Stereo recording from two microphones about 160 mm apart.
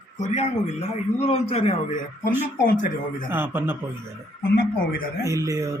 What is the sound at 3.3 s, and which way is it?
Speech, 15° right (ahead or behind).